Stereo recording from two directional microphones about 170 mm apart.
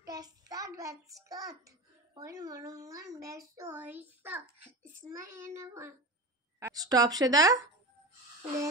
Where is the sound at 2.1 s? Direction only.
20° right (ahead or behind).